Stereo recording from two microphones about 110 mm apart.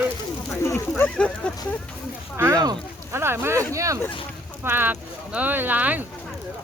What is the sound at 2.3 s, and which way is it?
Speech, 20° right (ahead or behind).